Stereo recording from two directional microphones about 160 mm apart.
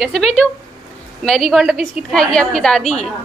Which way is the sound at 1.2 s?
Centre (ahead or behind).